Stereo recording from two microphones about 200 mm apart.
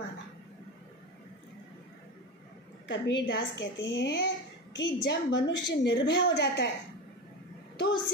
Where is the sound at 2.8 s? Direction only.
65° left (ahead or behind).